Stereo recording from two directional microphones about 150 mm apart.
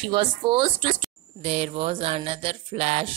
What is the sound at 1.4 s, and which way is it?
A woman's voice, 45° right (ahead or behind).